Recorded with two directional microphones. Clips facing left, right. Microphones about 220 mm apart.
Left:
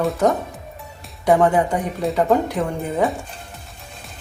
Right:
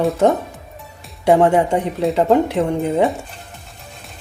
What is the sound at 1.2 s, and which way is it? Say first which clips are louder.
Speech: right 3 dB; 25° right (ahead or behind).